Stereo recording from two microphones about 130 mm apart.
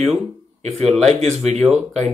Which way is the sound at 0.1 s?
55° right (ahead or behind).